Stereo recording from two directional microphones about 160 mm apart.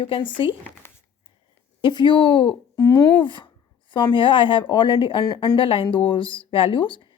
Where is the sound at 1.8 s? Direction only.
30° left (ahead or behind).